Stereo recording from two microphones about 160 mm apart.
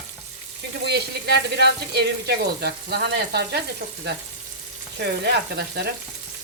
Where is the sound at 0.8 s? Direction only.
90° right.